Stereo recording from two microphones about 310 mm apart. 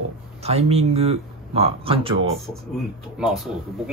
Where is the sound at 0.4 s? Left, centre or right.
Centre.